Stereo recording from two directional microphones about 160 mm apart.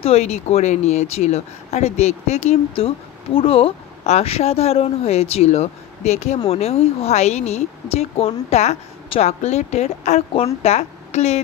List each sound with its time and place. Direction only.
0.0 s a woman's voice: 40° left (ahead or behind)